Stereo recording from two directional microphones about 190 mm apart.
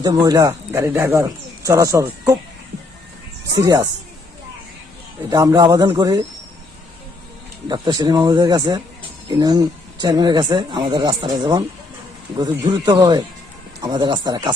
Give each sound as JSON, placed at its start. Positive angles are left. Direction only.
{"t": 0.0, "sound": "speech", "side_deg": -20}
{"t": 3.6, "sound": "speech", "side_deg": -20}
{"t": 5.3, "sound": "speech", "side_deg": -20}
{"t": 7.7, "sound": "speech", "side_deg": -20}